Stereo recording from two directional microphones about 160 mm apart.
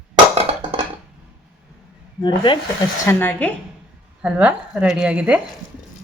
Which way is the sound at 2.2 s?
30° left (ahead or behind).